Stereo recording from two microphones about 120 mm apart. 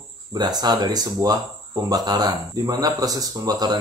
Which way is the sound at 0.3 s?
35° right (ahead or behind).